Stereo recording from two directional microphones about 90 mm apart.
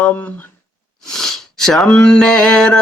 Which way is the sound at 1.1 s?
5° left (ahead or behind).